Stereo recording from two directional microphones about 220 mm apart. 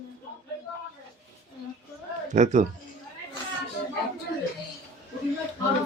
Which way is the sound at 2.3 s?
35° right (ahead or behind).